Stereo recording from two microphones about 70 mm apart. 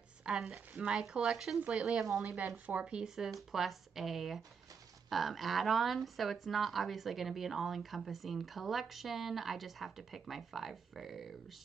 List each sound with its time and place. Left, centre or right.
0.2 s speech: centre
2.2 s speech: right
3.3 s speech: centre